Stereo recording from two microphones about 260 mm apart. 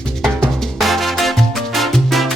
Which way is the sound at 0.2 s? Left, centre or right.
Centre.